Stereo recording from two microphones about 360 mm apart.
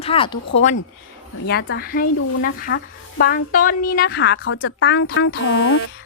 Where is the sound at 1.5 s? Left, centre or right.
Left.